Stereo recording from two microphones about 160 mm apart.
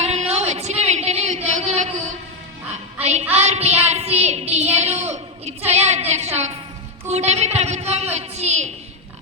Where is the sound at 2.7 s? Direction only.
45° right (ahead or behind).